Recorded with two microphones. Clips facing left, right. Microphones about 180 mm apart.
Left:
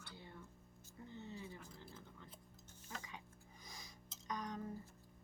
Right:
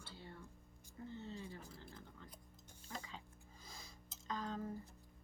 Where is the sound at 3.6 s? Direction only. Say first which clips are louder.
Even; 15° left (ahead or behind).